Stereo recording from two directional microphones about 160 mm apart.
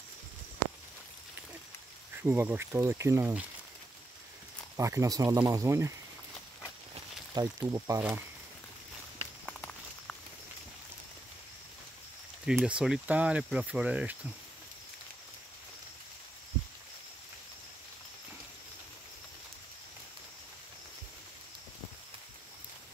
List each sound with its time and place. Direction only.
2.2 s speech: 10° right (ahead or behind)
4.7 s speech: 20° right (ahead or behind)
7.4 s speech: 25° right (ahead or behind)
9.5 s walk: 5° left (ahead or behind)
12.4 s speech: 5° right (ahead or behind)